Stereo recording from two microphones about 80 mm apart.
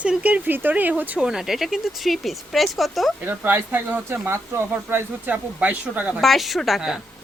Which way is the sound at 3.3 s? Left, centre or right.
Right.